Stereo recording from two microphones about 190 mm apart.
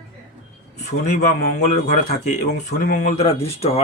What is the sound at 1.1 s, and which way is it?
A man's voice, 40° left (ahead or behind).